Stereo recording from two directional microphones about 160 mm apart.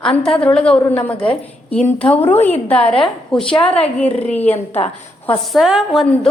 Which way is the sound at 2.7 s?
35° left (ahead or behind).